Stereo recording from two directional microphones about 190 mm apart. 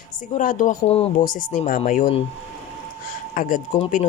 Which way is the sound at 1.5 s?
45° left (ahead or behind).